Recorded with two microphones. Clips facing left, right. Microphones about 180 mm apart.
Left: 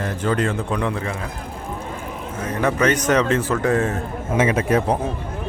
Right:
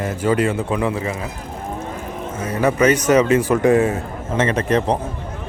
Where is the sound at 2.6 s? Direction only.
10° right (ahead or behind).